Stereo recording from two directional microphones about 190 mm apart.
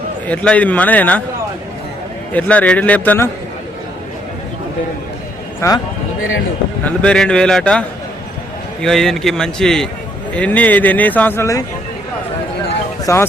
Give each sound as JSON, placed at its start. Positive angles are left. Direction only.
{"t": 0.3, "sound": "a man's voice", "side_deg": 5}
{"t": 2.3, "sound": "a man's voice", "side_deg": 5}
{"t": 5.5, "sound": "speech", "side_deg": 15}
{"t": 6.8, "sound": "a man's voice", "side_deg": 5}
{"t": 13.1, "sound": "a man's voice", "side_deg": 15}